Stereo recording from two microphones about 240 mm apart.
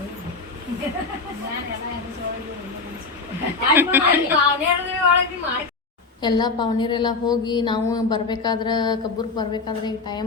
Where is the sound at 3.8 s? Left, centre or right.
Centre.